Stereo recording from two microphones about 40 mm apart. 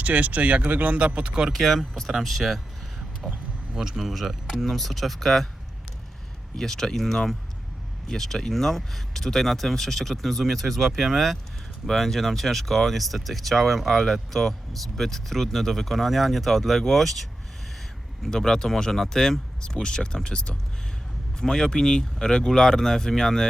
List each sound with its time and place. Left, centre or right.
0.0 s speech: right
1.5 s speech: centre
3.8 s speech: centre
4.0 s speech: centre
6.6 s speech: centre
18.3 s speech: centre